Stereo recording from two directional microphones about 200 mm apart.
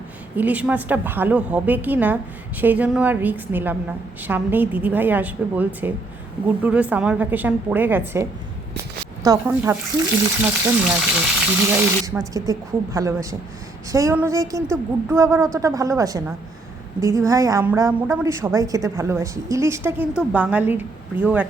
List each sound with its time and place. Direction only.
0.3 s a woman's voice: 10° right (ahead or behind)